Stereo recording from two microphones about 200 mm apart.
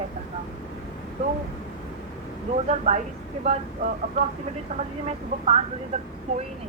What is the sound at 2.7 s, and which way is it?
Speech, 35° right (ahead or behind).